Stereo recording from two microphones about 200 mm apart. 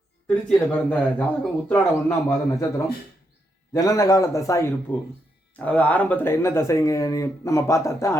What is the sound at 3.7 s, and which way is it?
Speech, 20° left (ahead or behind).